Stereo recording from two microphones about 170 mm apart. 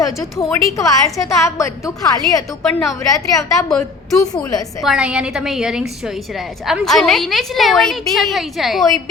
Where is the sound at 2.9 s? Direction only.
20° left (ahead or behind).